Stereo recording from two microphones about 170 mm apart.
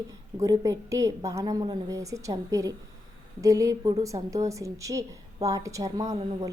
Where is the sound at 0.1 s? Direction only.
20° right (ahead or behind).